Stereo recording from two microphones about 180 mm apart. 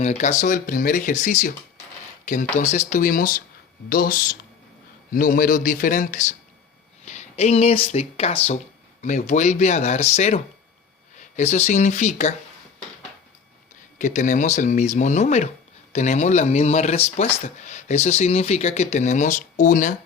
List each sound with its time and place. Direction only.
0.0 s speech: 40° left (ahead or behind)
14.0 s speech: 45° left (ahead or behind)